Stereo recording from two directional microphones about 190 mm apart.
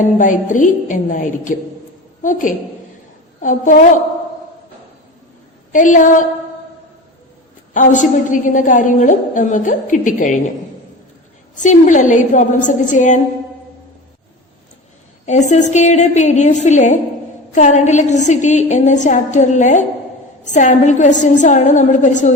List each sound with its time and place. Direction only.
0.2 s a woman's voice: 40° left (ahead or behind)
5.7 s a woman's voice: 40° left (ahead or behind)
7.7 s a woman's voice: 45° left (ahead or behind)
11.5 s a woman's voice: 40° left (ahead or behind)
15.3 s a woman's voice: 40° left (ahead or behind)